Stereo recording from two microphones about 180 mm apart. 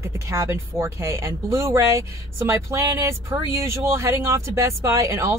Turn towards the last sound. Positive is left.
turn(degrees=-15)  # may be behind; listen again after turning